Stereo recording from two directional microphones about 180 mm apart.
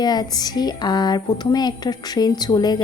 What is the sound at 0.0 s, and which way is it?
Speech, 20° left (ahead or behind).